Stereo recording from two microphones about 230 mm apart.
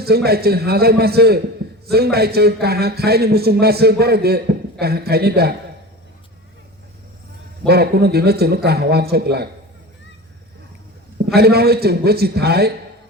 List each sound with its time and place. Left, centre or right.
0.0 s a man's voice: right
7.7 s a man's voice: right
11.3 s a man's voice: right